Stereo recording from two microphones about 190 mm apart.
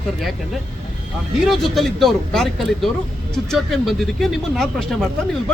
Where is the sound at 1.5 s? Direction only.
Centre (ahead or behind).